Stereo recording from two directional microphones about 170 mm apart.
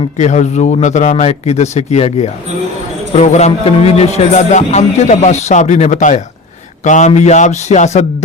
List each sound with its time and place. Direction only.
0.0 s speech: 45° left (ahead or behind)